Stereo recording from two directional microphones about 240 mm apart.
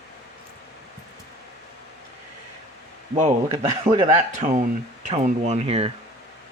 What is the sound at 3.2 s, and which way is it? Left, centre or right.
Speech, right.